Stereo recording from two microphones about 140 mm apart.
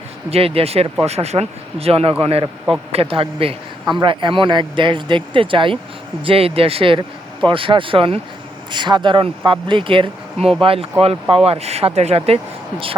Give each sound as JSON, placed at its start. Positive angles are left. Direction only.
{"t": 0.3, "sound": "speech", "side_deg": -45}